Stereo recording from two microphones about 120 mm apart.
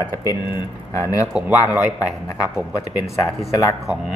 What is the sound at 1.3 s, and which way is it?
Speech, 15° right (ahead or behind).